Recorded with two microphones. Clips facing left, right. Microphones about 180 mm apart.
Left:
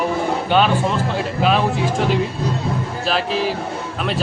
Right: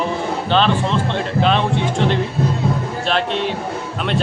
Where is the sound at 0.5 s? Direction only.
10° left (ahead or behind).